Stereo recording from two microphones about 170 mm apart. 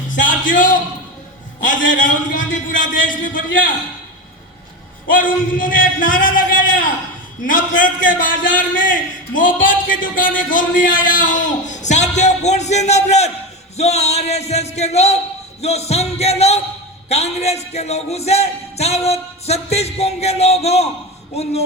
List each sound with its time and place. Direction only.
0.1 s a sound: 50° left (ahead or behind)
1.6 s a man's voice: 50° left (ahead or behind)
5.1 s a man's voice: 50° left (ahead or behind)